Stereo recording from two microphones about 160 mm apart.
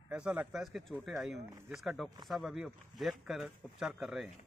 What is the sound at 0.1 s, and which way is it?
Speech, 5° right (ahead or behind).